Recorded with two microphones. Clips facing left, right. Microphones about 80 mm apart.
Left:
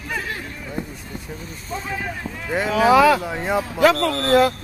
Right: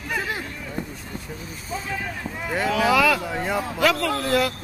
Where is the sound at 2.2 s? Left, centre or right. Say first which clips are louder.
Even; centre.